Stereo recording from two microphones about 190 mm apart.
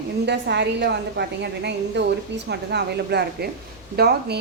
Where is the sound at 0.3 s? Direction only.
65° right (ahead or behind).